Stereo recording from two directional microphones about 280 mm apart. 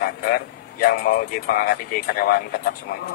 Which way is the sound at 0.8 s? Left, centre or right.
Left.